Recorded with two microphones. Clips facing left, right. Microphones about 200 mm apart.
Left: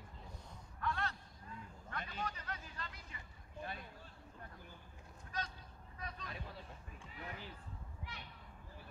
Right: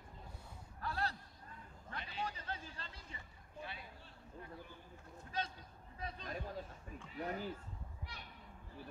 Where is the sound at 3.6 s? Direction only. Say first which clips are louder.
Left 2 dB; 45° left (ahead or behind).